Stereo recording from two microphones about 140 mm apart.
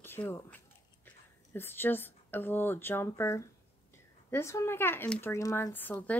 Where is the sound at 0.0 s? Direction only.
15° left (ahead or behind).